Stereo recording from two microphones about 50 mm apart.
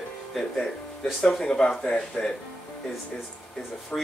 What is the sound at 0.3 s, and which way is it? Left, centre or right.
Speech, centre.